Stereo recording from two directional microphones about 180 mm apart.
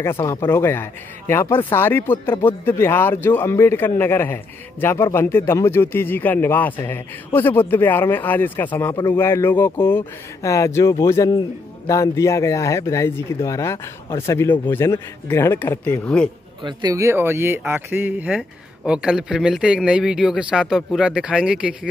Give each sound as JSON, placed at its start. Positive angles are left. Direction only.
{"t": 0.0, "sound": "a man's voice", "side_deg": 15}
{"t": 16.6, "sound": "speech", "side_deg": -20}